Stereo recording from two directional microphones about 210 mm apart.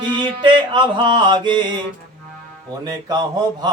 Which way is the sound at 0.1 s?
20° right (ahead or behind).